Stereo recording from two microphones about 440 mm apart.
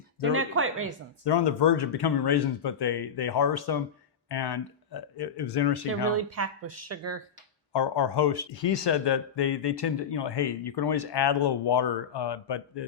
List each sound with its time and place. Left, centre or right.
0.2 s speech: right
1.2 s speech: left
6.1 s speech: right
7.7 s speech: left